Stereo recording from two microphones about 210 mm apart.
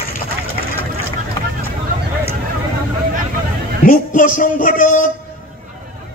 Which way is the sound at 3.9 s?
40° left (ahead or behind).